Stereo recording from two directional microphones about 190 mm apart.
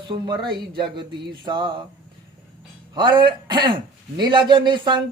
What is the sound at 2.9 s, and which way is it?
Speech, 25° right (ahead or behind).